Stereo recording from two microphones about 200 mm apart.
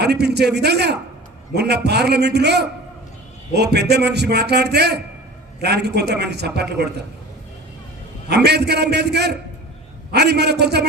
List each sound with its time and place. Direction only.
0.0 s a man's voice: 55° right (ahead or behind)
8.3 s a man's voice: 55° right (ahead or behind)